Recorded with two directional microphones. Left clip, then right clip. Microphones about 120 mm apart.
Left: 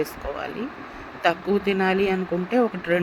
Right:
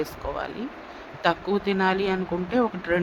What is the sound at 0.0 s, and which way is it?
Speech, 15° left (ahead or behind).